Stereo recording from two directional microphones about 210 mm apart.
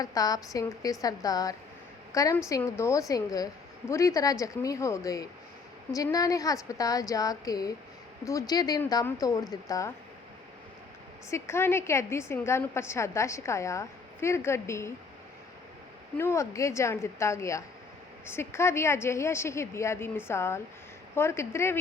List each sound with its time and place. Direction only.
0.0 s a woman's voice: 15° left (ahead or behind)
11.3 s a woman's voice: 15° left (ahead or behind)
16.1 s a woman's voice: 10° left (ahead or behind)